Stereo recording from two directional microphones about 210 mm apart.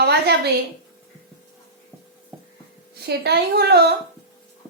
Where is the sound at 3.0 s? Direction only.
50° right (ahead or behind).